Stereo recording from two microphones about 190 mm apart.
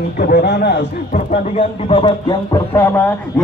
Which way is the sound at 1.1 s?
30° left (ahead or behind).